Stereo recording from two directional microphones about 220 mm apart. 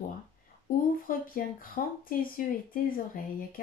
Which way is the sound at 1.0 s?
40° left (ahead or behind).